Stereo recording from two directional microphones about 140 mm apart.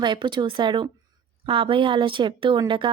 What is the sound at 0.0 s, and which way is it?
A woman's voice, 35° right (ahead or behind).